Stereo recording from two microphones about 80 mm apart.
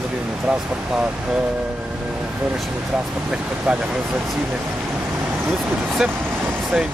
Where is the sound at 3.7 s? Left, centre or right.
Centre.